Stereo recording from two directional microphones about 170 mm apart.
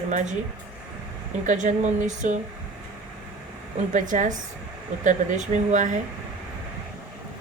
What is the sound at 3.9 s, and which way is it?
Speech, 45° right (ahead or behind).